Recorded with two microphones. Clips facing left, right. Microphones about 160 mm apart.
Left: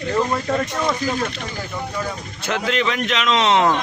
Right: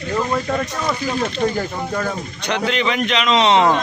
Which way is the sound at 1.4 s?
55° right (ahead or behind).